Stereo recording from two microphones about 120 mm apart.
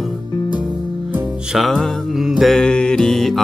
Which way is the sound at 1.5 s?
Centre (ahead or behind).